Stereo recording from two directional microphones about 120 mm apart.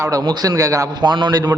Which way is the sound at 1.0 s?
40° right (ahead or behind).